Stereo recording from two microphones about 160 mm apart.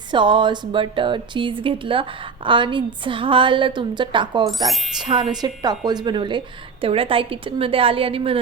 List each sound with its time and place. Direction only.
0.1 s speech: 30° right (ahead or behind)
4.4 s speech: centre (ahead or behind)
5.0 s a woman's voice: 30° right (ahead or behind)